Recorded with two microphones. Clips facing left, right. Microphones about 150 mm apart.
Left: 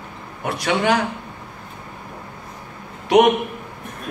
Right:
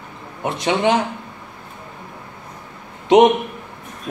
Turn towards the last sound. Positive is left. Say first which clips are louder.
# right 3 dB
turn(degrees=-20)  # may be behind; listen again after turning